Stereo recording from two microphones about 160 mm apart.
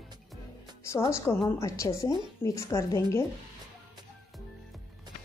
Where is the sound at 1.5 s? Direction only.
20° left (ahead or behind).